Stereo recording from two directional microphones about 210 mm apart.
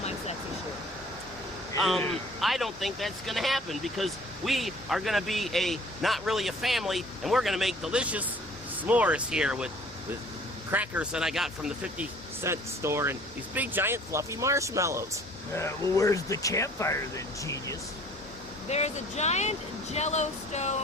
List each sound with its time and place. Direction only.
1.8 s speech: centre (ahead or behind)
10.7 s speech: 5° right (ahead or behind)
15.5 s speech: 15° left (ahead or behind)
18.7 s speech: 30° left (ahead or behind)